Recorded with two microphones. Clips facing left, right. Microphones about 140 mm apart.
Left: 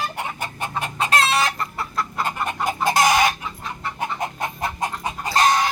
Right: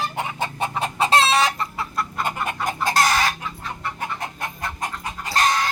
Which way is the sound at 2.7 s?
10° left (ahead or behind).